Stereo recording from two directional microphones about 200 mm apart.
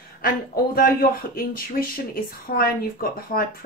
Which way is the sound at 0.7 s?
50° left (ahead or behind).